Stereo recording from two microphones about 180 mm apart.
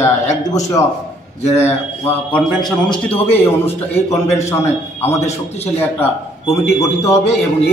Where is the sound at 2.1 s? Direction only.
5° left (ahead or behind).